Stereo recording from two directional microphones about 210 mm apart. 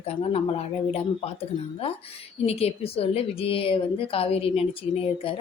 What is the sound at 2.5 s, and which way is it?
A woman's voice, 30° left (ahead or behind).